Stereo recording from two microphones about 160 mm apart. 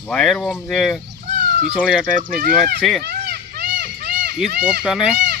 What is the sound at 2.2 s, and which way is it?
Speech, 60° right (ahead or behind).